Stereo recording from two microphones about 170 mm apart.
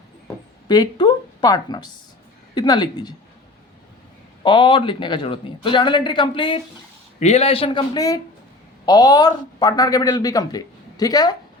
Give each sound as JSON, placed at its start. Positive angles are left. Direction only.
{"t": 0.7, "sound": "speech", "side_deg": 25}
{"t": 4.4, "sound": "speech", "side_deg": 30}
{"t": 7.2, "sound": "a man's voice", "side_deg": 40}